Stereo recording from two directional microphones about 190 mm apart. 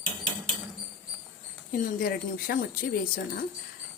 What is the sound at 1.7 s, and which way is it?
Speech, 50° left (ahead or behind).